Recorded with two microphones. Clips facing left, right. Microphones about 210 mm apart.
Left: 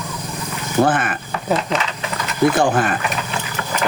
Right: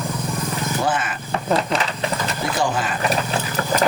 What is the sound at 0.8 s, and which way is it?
Speech, 55° left (ahead or behind).